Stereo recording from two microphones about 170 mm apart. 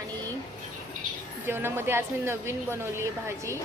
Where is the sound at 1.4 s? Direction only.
15° right (ahead or behind).